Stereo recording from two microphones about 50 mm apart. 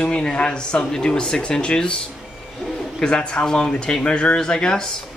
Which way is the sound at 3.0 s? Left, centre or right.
Centre.